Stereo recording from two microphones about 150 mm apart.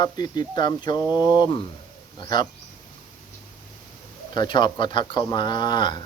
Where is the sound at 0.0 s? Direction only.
30° left (ahead or behind).